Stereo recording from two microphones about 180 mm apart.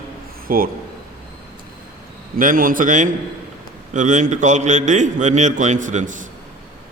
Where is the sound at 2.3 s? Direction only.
50° right (ahead or behind).